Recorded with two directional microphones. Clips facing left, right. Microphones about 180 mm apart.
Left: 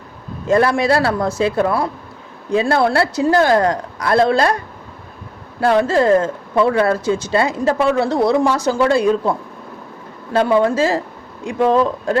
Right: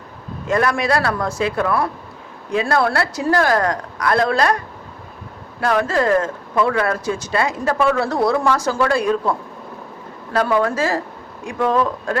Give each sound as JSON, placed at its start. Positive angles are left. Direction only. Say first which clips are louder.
{"t": 0.4, "sound": "a woman's voice", "louder": "left 4 dB", "side_deg": 30}
{"t": 10.3, "sound": "a woman's voice", "louder": "left 4 dB", "side_deg": 25}